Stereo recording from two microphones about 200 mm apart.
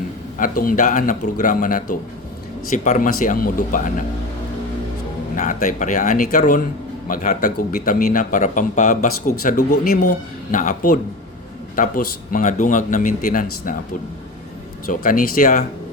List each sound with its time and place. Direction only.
0.3 s a man's voice: 45° left (ahead or behind)
5.4 s a man's voice: 40° left (ahead or behind)
14.8 s speech: 45° left (ahead or behind)